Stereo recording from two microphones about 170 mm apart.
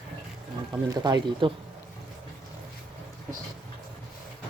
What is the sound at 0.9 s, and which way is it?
Speech, 25° right (ahead or behind).